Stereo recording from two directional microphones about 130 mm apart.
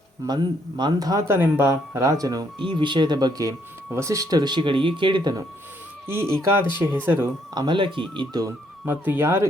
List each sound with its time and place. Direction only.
0.2 s speech: 25° right (ahead or behind)
6.1 s speech: 20° right (ahead or behind)
7.5 s speech: 35° right (ahead or behind)
8.8 s speech: 15° right (ahead or behind)